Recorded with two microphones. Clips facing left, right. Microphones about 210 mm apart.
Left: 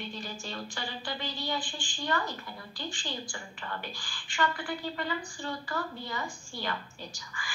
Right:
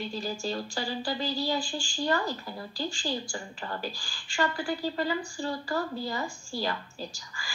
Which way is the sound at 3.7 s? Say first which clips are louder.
Right 4 dB; 30° right (ahead or behind).